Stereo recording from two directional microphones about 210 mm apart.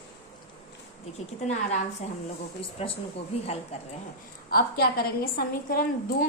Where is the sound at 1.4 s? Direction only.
35° left (ahead or behind).